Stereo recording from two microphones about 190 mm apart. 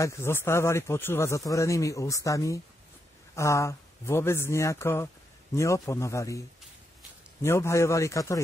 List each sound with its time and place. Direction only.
0.0 s speech: 15° left (ahead or behind)
7.4 s speech: 15° left (ahead or behind)